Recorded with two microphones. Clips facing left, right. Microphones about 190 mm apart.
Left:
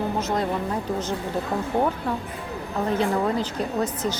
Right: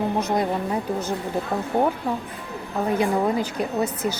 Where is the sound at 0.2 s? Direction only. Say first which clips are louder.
Right 2 dB; 15° right (ahead or behind).